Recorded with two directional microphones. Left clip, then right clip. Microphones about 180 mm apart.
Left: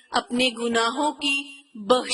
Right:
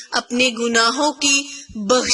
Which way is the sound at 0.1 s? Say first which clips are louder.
Right 4 dB; 15° right (ahead or behind).